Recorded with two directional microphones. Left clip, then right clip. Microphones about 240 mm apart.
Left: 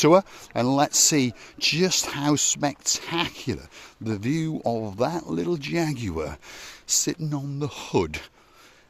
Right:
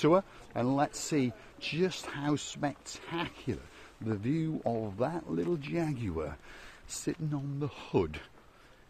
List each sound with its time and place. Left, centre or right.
0.0 s speech: left